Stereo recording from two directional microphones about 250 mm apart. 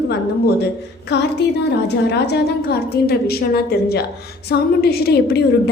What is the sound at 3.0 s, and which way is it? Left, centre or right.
A woman's voice, left.